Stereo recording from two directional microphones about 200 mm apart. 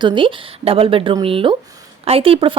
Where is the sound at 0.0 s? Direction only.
25° right (ahead or behind).